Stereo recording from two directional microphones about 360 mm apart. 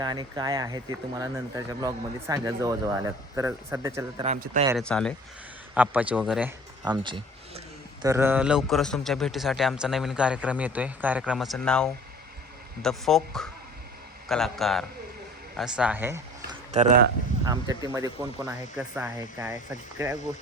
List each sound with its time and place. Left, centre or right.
0.0 s speech: centre
4.3 s speech: centre
4.7 s a man's voice: centre
16.7 s speech: centre